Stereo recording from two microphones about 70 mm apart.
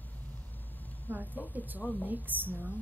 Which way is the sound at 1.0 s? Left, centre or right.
Right.